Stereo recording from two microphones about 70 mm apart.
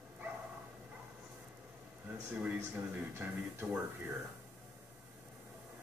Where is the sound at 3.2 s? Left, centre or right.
Right.